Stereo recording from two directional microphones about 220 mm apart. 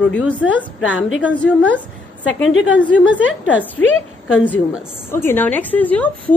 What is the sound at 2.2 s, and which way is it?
A woman's voice, 60° left (ahead or behind).